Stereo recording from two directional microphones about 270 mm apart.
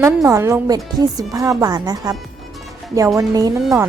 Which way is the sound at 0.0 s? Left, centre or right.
Centre.